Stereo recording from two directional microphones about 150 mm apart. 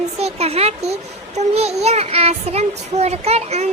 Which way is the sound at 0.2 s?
45° right (ahead or behind).